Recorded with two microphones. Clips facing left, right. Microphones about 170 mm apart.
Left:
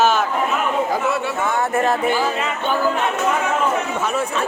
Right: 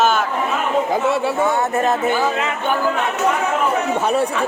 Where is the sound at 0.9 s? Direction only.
25° right (ahead or behind).